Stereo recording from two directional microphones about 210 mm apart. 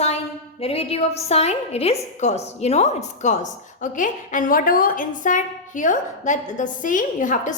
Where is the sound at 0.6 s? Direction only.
25° left (ahead or behind).